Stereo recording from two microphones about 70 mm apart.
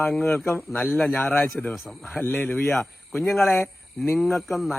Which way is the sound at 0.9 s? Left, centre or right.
Centre.